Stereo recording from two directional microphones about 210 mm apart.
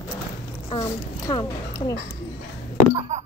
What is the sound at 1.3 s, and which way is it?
Speech, 20° left (ahead or behind).